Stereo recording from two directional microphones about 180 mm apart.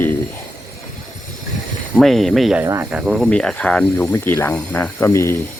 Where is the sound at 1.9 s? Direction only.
Centre (ahead or behind).